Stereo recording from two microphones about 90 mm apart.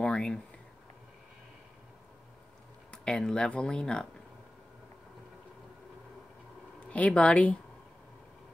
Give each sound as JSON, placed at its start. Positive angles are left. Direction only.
{"t": 0.0, "sound": "a sound", "side_deg": 10}
{"t": 2.9, "sound": "speech", "side_deg": 10}
{"t": 6.9, "sound": "speech", "side_deg": 15}